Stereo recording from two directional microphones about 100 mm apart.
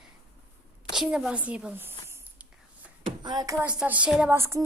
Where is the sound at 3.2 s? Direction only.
45° right (ahead or behind).